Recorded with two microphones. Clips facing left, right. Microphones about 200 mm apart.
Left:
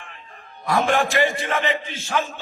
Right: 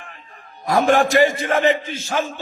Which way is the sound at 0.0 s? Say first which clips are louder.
Right 1 dB; 40° right (ahead or behind).